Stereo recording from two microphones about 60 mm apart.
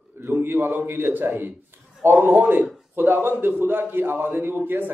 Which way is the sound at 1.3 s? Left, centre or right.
Right.